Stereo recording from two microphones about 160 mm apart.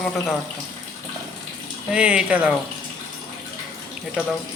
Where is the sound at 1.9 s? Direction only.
5° right (ahead or behind).